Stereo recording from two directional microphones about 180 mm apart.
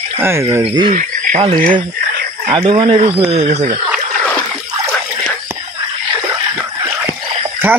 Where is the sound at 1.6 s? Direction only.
50° right (ahead or behind).